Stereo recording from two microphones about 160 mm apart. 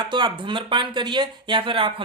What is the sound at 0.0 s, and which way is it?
Speech, 30° right (ahead or behind).